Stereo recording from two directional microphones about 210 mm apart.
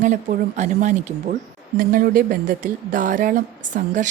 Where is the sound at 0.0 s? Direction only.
35° right (ahead or behind).